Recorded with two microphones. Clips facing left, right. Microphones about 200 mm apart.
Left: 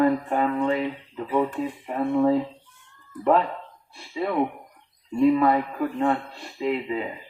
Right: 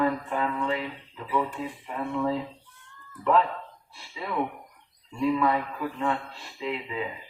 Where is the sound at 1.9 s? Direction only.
40° left (ahead or behind).